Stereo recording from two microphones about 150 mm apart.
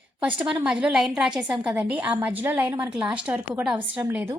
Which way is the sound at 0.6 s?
5° right (ahead or behind).